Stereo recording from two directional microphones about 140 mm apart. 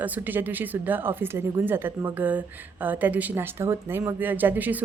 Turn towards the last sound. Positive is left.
turn(degrees=-10)  # may be behind; listen again after turning